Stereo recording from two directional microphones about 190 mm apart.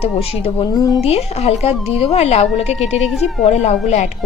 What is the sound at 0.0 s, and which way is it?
A woman's voice, 30° left (ahead or behind).